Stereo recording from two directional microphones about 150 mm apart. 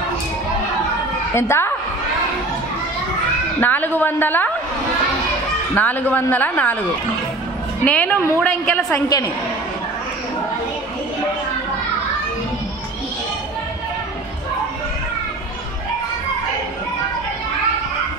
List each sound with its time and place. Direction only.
1.3 s a woman's voice: 15° left (ahead or behind)
3.6 s a woman's voice: 10° left (ahead or behind)
5.8 s a woman's voice: 10° left (ahead or behind)
7.8 s a woman's voice: 10° left (ahead or behind)